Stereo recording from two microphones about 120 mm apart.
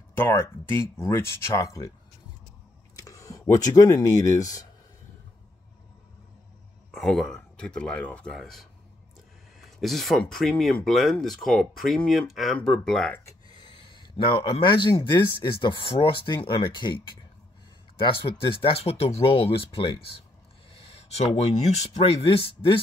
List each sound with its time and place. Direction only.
0.2 s speech: 20° left (ahead or behind)
3.0 s speech: 30° left (ahead or behind)
6.9 s speech: 5° left (ahead or behind)
13.1 s speech: 25° left (ahead or behind)
13.5 s a sound: 40° left (ahead or behind)
14.1 s speech: 45° left (ahead or behind)
18.0 s speech: 50° left (ahead or behind)